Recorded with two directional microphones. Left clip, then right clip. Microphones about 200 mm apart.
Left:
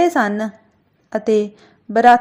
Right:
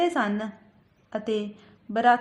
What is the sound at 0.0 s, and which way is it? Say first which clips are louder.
A woman's voice: left 9 dB; 30° left (ahead or behind).